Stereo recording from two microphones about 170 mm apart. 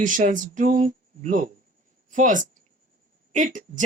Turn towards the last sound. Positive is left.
turn(degrees=-50)  # may be behind; listen again after turning